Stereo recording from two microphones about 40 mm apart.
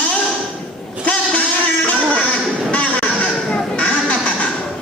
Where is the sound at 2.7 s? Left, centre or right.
Left.